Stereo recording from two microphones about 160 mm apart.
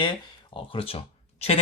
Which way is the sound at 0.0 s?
30° left (ahead or behind).